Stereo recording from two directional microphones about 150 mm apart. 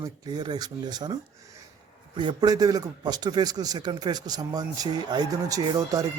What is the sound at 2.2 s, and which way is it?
A man's voice, 30° right (ahead or behind).